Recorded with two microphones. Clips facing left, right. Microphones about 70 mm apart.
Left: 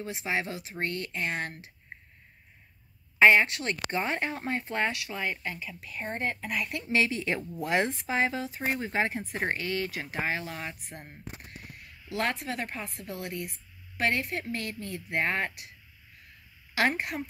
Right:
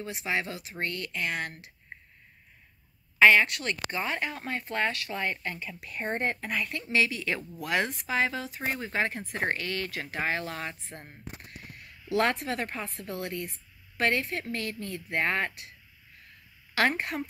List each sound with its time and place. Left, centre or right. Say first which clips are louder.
0.0 s speech: even; left
3.2 s speech: even; left; by 6.6 s centre
6.9 s speech: left 1 dB; left; by 11.0 s centre
12.1 s speech: right 4 dB; centre
16.7 s speech: right 1 dB; centre